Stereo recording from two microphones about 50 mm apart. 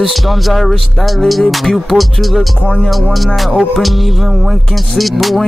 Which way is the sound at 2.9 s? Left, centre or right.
Centre.